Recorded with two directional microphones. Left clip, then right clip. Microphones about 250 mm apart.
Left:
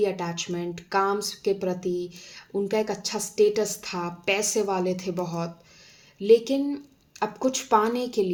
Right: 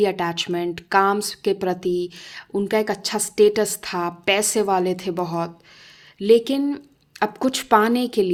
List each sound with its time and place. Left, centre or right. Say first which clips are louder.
0.0 s speech: right 6 dB; right